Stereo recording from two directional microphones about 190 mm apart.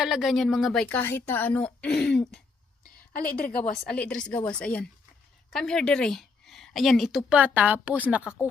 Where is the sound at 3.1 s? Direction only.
50° left (ahead or behind).